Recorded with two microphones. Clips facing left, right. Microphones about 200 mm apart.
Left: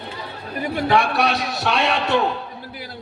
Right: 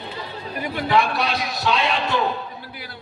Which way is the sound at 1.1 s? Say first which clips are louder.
Left 3 dB; 65° left (ahead or behind).